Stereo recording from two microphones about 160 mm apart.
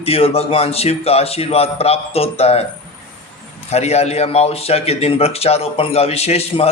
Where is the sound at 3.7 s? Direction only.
40° left (ahead or behind).